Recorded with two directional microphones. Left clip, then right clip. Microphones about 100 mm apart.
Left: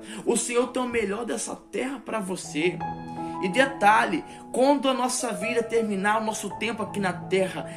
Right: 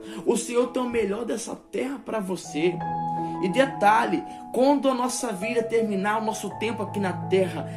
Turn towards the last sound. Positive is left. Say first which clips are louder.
# right 2 dB
turn(degrees=-25)  # may be behind; listen again after turning